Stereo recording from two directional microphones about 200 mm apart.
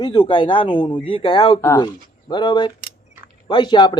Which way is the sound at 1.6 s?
15° left (ahead or behind).